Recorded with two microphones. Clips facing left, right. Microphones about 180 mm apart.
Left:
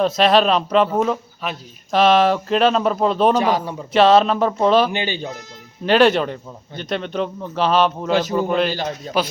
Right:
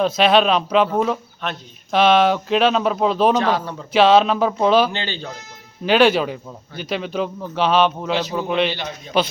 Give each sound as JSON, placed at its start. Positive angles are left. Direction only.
{"t": 0.0, "sound": "speech", "side_deg": 0}
{"t": 3.3, "sound": "a man's voice", "side_deg": 10}
{"t": 3.9, "sound": "speech", "side_deg": 0}
{"t": 4.9, "sound": "a man's voice", "side_deg": 15}
{"t": 5.8, "sound": "speech", "side_deg": 0}
{"t": 8.7, "sound": "a man's voice", "side_deg": 40}